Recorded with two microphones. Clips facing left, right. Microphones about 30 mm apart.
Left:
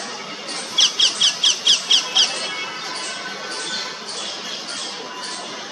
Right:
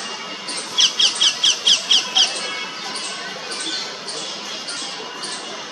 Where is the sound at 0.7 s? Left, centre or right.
Centre.